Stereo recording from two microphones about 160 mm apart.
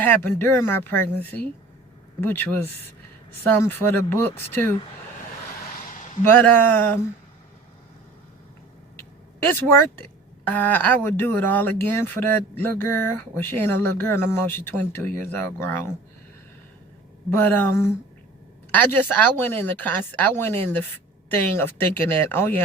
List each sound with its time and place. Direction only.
0.0 s speech: 15° left (ahead or behind)
5.7 s a sound: 60° left (ahead or behind)
6.2 s speech: 10° left (ahead or behind)
9.0 s speech: 15° left (ahead or behind)
17.3 s speech: 15° left (ahead or behind)